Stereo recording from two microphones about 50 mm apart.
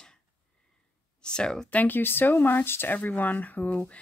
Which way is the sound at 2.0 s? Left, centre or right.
Left.